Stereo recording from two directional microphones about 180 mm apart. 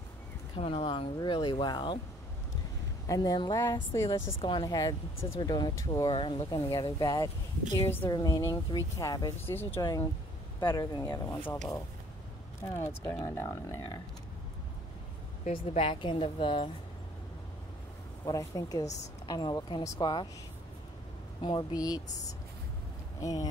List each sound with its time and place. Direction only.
0.6 s a woman's voice: 30° left (ahead or behind)
3.1 s a woman's voice: 20° left (ahead or behind)
4.4 s a woman's voice: 25° left (ahead or behind)
11.4 s speech: 5° left (ahead or behind)
12.7 s speech: 15° left (ahead or behind)
15.4 s a woman's voice: 35° left (ahead or behind)
18.2 s a woman's voice: 20° left (ahead or behind)
21.4 s speech: 25° left (ahead or behind)
23.2 s a woman's voice: 20° left (ahead or behind)